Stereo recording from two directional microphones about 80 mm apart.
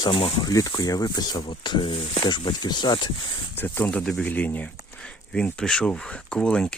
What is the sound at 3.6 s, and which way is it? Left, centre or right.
Speech, left.